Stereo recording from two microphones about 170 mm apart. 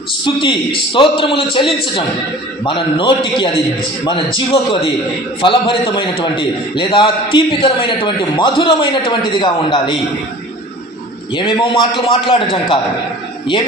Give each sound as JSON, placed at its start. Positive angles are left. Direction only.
{"t": 0.3, "sound": "a man's voice", "side_deg": 30}
{"t": 11.3, "sound": "a man's voice", "side_deg": 25}